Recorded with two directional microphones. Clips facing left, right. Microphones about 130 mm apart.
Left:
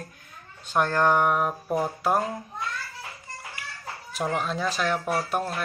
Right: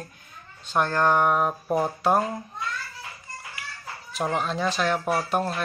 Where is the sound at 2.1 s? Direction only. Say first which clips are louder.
Right 2 dB; centre (ahead or behind).